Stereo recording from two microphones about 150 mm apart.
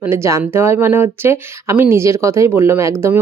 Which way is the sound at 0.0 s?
15° right (ahead or behind).